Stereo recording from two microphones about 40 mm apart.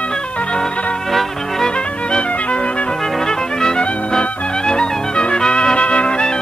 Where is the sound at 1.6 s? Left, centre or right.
Left.